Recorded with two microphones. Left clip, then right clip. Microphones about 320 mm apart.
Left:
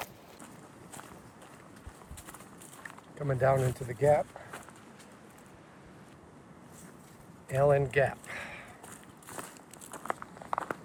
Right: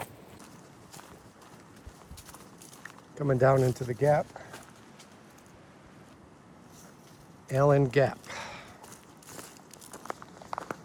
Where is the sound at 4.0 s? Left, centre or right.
Right.